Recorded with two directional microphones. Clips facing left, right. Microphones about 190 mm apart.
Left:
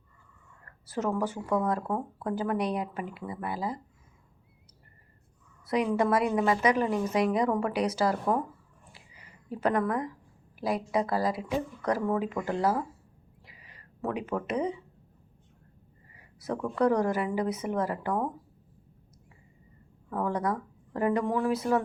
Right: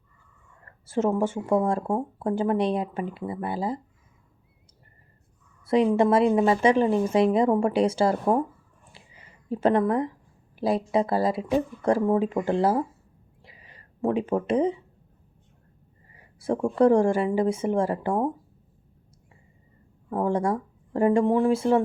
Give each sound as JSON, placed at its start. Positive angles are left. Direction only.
{"t": 0.6, "sound": "speech", "side_deg": -25}
{"t": 5.6, "sound": "a woman's voice", "side_deg": -25}
{"t": 13.4, "sound": "a sound", "side_deg": -25}
{"t": 16.1, "sound": "speech", "side_deg": -30}
{"t": 20.1, "sound": "speech", "side_deg": -30}